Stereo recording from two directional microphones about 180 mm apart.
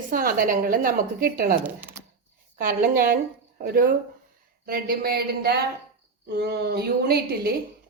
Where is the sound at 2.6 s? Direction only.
55° right (ahead or behind).